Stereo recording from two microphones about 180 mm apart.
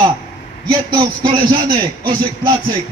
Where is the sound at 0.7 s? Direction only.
25° right (ahead or behind).